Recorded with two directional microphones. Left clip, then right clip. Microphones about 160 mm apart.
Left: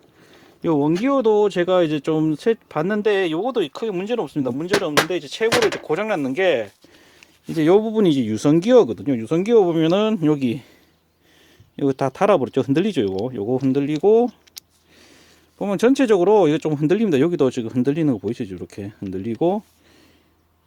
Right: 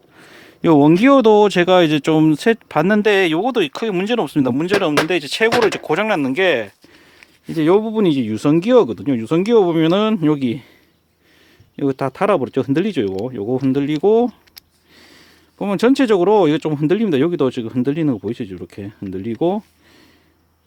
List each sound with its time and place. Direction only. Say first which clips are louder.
0.2 s speech: right 7 dB; 45° right (ahead or behind); by 6.7 s 25° right (ahead or behind)
7.2 s speech: right 2 dB; 5° right (ahead or behind)
11.8 s speech: right 1 dB; centre (ahead or behind)
14.5 s a sound: left 1 dB; 15° right (ahead or behind)
15.5 s speech: right 2 dB; 15° right (ahead or behind)